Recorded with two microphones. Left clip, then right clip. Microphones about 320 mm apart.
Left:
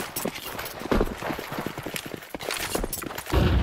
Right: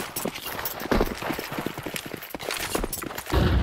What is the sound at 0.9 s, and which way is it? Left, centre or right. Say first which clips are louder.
Clip-clop: right 1 dB; centre.